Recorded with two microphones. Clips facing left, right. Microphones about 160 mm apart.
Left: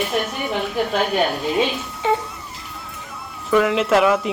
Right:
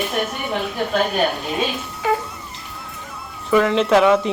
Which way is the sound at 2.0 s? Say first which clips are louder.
Even; 25° left (ahead or behind).